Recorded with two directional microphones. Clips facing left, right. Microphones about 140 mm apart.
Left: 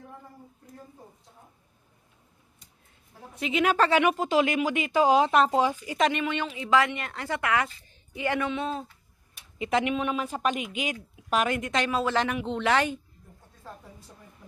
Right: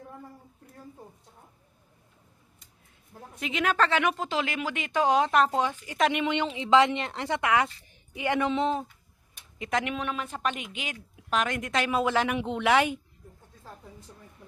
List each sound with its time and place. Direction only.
3.4 s a woman's voice: 5° left (ahead or behind)
6.1 s a woman's voice: 20° right (ahead or behind)
9.6 s a woman's voice: 5° left (ahead or behind); by 13.0 s 10° right (ahead or behind)